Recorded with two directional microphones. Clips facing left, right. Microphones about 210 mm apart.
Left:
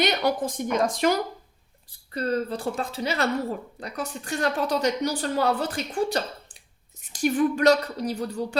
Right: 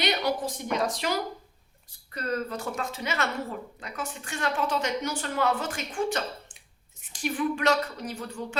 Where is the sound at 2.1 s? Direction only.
30° left (ahead or behind).